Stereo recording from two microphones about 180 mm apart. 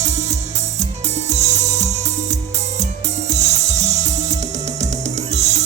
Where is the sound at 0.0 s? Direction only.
40° right (ahead or behind).